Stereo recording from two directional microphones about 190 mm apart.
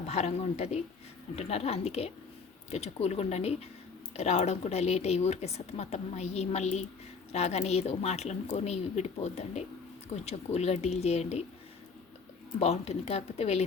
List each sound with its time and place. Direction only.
0.1 s speech: 35° left (ahead or behind)
12.5 s speech: 35° left (ahead or behind)